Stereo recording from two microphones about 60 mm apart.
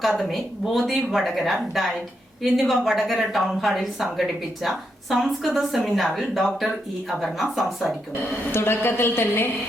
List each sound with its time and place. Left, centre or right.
0.0 s a woman's voice: centre
8.5 s a woman's voice: left